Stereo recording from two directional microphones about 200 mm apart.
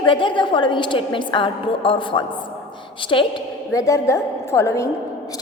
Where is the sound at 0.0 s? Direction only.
25° left (ahead or behind).